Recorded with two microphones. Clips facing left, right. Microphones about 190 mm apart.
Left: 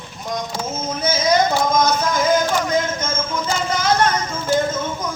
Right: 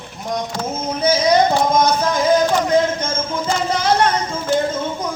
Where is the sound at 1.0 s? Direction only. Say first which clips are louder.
Right 3 dB; 35° right (ahead or behind).